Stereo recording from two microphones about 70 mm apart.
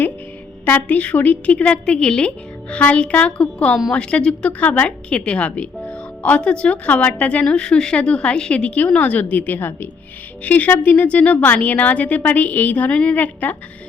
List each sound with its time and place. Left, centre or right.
0.6 s a woman's voice: left